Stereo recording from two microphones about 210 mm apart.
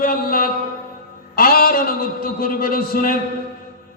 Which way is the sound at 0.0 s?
45° left (ahead or behind).